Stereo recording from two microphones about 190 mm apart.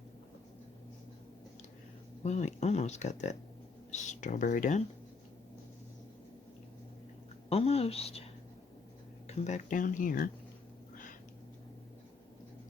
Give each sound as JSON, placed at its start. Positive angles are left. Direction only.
{"t": 2.2, "sound": "speech", "side_deg": 35}
{"t": 7.5, "sound": "speech", "side_deg": 30}
{"t": 9.2, "sound": "speech", "side_deg": 35}